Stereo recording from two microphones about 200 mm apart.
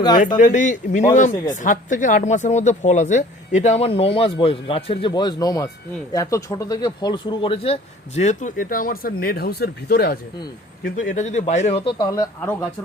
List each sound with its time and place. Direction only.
0.3 s speech: 40° left (ahead or behind)